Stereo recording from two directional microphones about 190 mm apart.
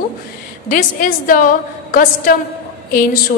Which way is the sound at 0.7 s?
45° left (ahead or behind).